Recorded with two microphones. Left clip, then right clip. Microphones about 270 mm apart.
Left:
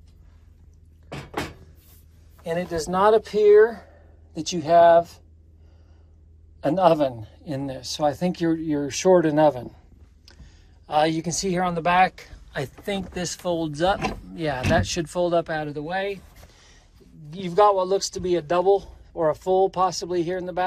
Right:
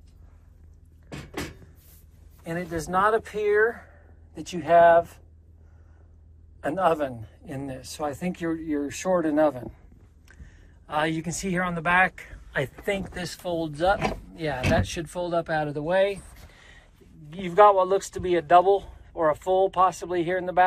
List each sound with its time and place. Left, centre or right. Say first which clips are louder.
1.1 s a sound: left 5 dB; centre
2.4 s speech: left 5 dB; left
7.4 s speech: left 6 dB; centre
17.3 s speech: right 1 dB; left